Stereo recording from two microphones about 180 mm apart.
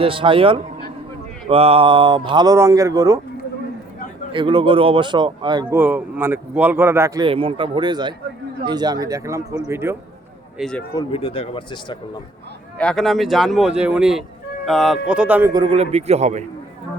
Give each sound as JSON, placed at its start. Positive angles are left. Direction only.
{"t": 0.0, "sound": "speech", "side_deg": -30}
{"t": 4.3, "sound": "speech", "side_deg": -30}
{"t": 5.7, "sound": "a man's voice", "side_deg": -10}
{"t": 7.3, "sound": "a man's voice", "side_deg": -30}
{"t": 10.6, "sound": "speech", "side_deg": 5}
{"t": 10.9, "sound": "speech", "side_deg": 30}
{"t": 12.8, "sound": "a man's voice", "side_deg": 5}
{"t": 15.5, "sound": "a man's voice", "side_deg": -30}